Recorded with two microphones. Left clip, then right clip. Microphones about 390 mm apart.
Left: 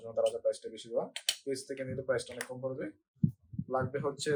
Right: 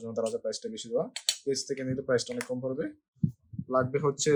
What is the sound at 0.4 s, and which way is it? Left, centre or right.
Speech, right.